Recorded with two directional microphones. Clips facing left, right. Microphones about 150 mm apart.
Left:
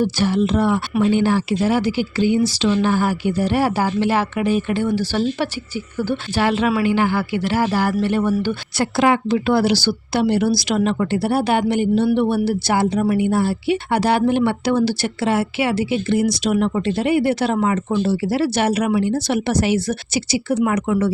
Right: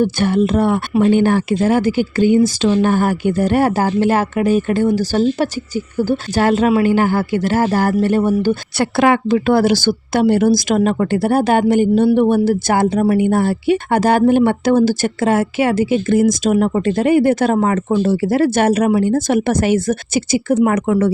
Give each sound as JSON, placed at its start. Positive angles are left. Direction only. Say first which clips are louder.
{"t": 0.0, "sound": "speech", "louder": "right 3 dB", "side_deg": -50}
{"t": 8.8, "sound": "speech", "louder": "right 2 dB", "side_deg": -60}